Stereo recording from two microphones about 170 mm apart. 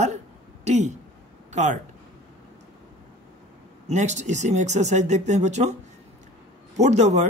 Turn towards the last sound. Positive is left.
turn(degrees=-40)  # may be behind; listen again after turning